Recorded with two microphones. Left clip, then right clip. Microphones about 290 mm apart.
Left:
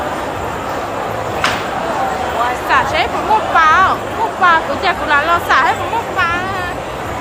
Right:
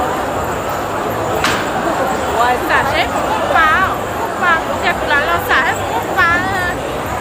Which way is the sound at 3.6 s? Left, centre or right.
Centre.